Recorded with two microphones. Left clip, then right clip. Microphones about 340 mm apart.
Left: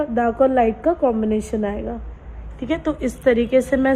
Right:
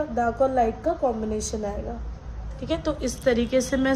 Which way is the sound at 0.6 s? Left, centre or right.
Left.